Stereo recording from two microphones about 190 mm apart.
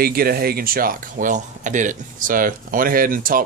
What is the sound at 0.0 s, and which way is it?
Speech, 50° right (ahead or behind).